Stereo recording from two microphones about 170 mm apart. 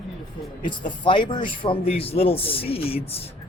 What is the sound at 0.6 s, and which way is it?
Speech, 30° left (ahead or behind).